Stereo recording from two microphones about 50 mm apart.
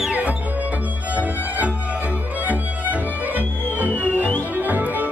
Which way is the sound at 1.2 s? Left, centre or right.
Right.